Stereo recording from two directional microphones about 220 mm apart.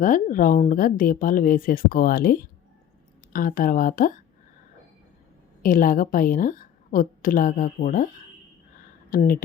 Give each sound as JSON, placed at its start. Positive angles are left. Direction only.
{"t": 0.0, "sound": "a woman's voice", "side_deg": 35}
{"t": 5.6, "sound": "a woman's voice", "side_deg": 40}